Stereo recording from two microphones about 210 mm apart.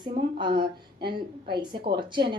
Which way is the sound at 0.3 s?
20° right (ahead or behind).